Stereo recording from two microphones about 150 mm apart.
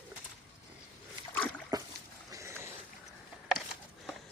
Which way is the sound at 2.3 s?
20° right (ahead or behind).